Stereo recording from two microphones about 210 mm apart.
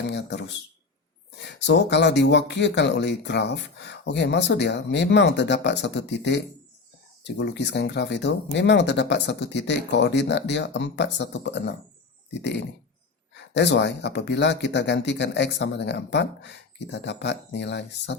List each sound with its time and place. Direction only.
0.1 s speech: 55° left (ahead or behind)